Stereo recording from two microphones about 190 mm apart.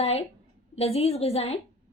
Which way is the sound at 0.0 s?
30° left (ahead or behind).